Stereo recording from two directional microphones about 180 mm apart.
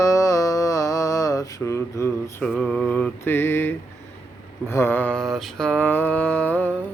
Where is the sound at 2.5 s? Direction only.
5° left (ahead or behind).